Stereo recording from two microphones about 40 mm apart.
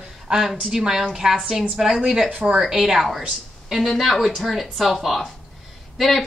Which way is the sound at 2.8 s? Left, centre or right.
Centre.